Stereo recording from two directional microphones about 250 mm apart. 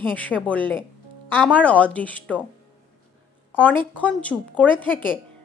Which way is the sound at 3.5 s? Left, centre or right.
Centre.